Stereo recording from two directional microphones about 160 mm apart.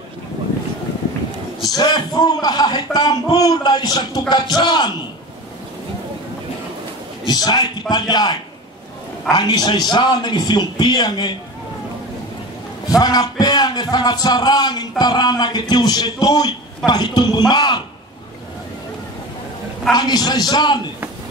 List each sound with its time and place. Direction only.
1.6 s a man's voice: 25° left (ahead or behind)
7.2 s a man's voice: 25° left (ahead or behind)
12.9 s a man's voice: 25° left (ahead or behind)
19.9 s a man's voice: 25° left (ahead or behind)